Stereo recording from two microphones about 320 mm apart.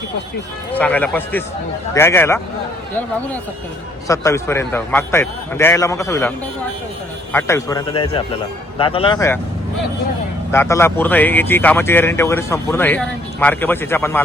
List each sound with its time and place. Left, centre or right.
0.7 s speech: centre
4.1 s speech: centre
7.3 s speech: centre
10.5 s speech: centre